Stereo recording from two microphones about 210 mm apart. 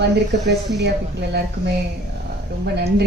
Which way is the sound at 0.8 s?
55° right (ahead or behind).